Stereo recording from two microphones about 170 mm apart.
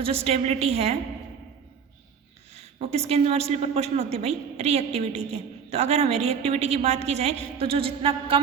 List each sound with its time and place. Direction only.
0.0 s a woman's voice: 35° right (ahead or behind)
2.7 s a woman's voice: 40° right (ahead or behind)